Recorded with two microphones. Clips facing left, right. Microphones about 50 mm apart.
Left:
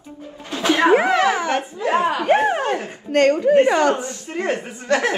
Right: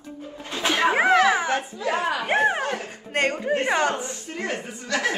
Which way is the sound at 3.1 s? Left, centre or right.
Right.